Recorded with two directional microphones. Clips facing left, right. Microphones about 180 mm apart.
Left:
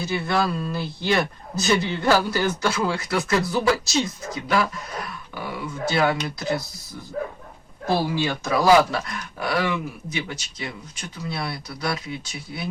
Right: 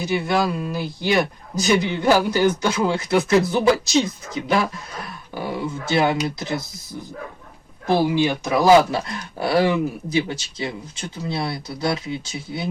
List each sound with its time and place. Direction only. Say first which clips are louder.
0.0 s speech: right 3 dB; 15° right (ahead or behind)
7.9 s speech: right 4 dB; 20° right (ahead or behind)